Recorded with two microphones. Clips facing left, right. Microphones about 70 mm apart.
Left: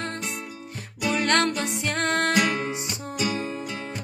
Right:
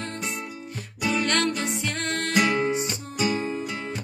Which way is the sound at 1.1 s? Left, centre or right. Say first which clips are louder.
Left 2 dB; left.